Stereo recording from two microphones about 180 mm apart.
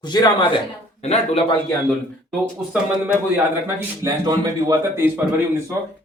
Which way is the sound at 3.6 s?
20° right (ahead or behind).